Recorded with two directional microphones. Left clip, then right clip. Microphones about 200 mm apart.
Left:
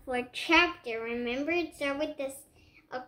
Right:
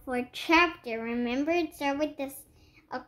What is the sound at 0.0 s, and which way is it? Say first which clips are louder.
A woman's voice: even; 50° right (ahead or behind).